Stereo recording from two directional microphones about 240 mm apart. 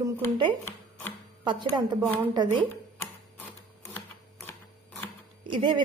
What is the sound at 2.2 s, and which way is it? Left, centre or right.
Speech, centre.